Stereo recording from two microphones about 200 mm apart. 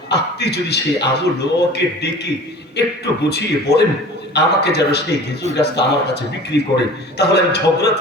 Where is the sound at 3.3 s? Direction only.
55° left (ahead or behind).